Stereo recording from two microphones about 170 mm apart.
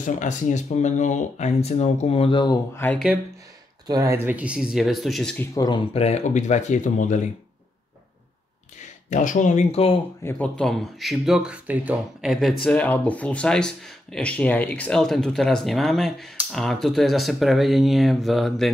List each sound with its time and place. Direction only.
0.0 s speech: 45° left (ahead or behind); by 2.8 s 25° left (ahead or behind)
3.8 s speech: 20° right (ahead or behind); by 5.5 s 5° left (ahead or behind)
5.5 s speech: 20° left (ahead or behind)
5.9 s speech: 40° left (ahead or behind)
9.1 s speech: 50° left (ahead or behind)
10.2 s speech: 5° left (ahead or behind)